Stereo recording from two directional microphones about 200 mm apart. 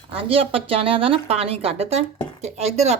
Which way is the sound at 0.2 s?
30° right (ahead or behind).